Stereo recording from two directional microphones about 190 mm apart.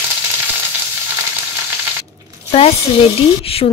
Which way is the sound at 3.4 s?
30° left (ahead or behind).